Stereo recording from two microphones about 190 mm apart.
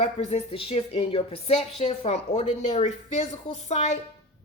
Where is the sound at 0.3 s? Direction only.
30° left (ahead or behind).